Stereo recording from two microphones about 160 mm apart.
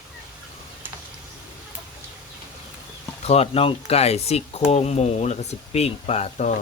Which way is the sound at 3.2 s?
40° left (ahead or behind).